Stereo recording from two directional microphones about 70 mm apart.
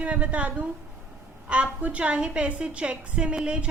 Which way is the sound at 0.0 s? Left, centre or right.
Centre.